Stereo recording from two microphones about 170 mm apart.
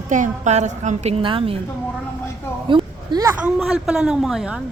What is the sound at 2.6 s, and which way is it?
Speech, 30° right (ahead or behind).